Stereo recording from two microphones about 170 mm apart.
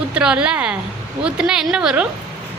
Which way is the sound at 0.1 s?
5° right (ahead or behind).